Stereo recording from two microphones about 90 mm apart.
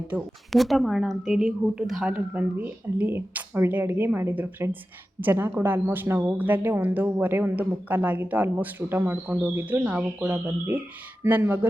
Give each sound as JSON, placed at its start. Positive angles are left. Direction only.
{"t": 0.5, "sound": "a woman's voice", "side_deg": 0}
{"t": 2.1, "sound": "speech", "side_deg": -15}